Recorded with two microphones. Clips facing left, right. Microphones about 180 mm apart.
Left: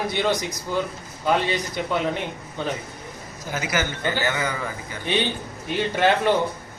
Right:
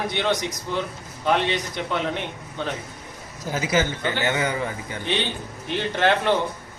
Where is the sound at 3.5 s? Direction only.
30° right (ahead or behind).